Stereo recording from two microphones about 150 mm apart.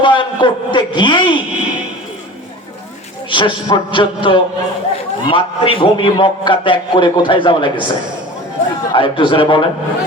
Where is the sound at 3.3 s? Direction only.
30° left (ahead or behind).